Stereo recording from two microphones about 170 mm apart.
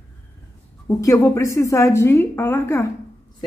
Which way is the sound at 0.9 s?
20° left (ahead or behind).